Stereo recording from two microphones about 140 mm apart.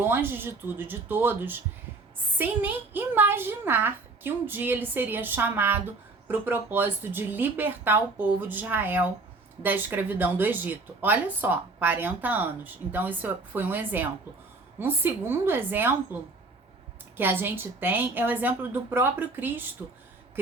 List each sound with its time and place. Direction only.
0.0 s a woman's voice: 15° right (ahead or behind)
17.2 s a woman's voice: 15° right (ahead or behind)